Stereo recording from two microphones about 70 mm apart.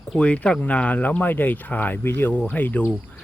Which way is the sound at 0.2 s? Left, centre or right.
Centre.